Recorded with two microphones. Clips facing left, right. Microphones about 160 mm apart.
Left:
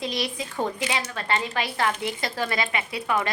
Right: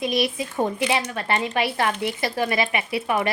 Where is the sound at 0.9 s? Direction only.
20° right (ahead or behind).